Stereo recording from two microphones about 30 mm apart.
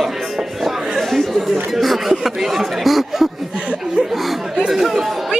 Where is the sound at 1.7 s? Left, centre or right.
Centre.